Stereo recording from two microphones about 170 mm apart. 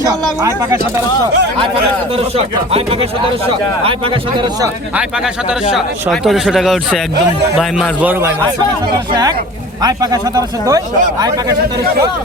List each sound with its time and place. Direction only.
2.1 s speech: 35° right (ahead or behind)
5.7 s speech: centre (ahead or behind)
9.8 s speech: 20° right (ahead or behind)